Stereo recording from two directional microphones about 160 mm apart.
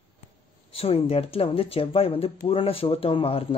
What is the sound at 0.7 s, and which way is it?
Speech, 40° left (ahead or behind).